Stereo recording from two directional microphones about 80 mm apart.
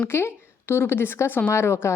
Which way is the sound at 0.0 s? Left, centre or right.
Left.